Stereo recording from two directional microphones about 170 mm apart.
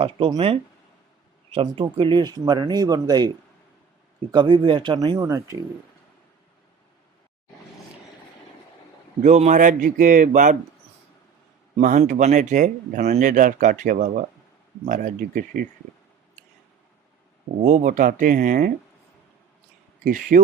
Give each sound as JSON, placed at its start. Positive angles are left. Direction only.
{"t": 0.0, "sound": "speech", "side_deg": -30}
{"t": 9.2, "sound": "speech", "side_deg": -45}
{"t": 11.8, "sound": "speech", "side_deg": -50}
{"t": 17.6, "sound": "speech", "side_deg": -45}
{"t": 20.1, "sound": "speech", "side_deg": -50}